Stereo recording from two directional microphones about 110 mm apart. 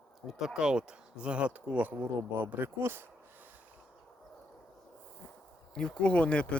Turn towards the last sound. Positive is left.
turn(degrees=10)  # may be behind; listen again after turning